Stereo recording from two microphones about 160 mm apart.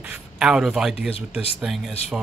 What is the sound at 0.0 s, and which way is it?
A man's voice, 5° right (ahead or behind).